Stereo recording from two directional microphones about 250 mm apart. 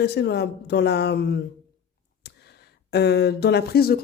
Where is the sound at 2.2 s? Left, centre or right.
Left.